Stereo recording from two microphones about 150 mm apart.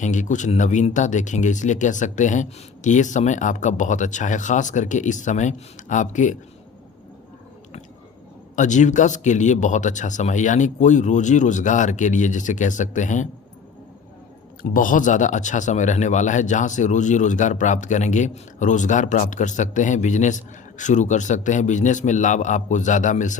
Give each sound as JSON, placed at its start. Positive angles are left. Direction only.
{"t": 0.0, "sound": "speech", "side_deg": 55}
{"t": 8.5, "sound": "speech", "side_deg": 55}
{"t": 14.6, "sound": "speech", "side_deg": 65}